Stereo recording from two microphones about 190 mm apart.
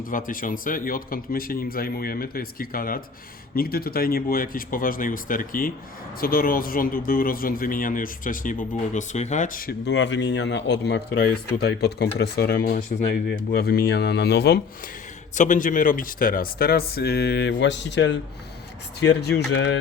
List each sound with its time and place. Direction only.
0.0 s speech: 45° left (ahead or behind)
9.9 s speech: 70° left (ahead or behind)
15.4 s speech: 45° left (ahead or behind); by 19.8 s 70° left (ahead or behind)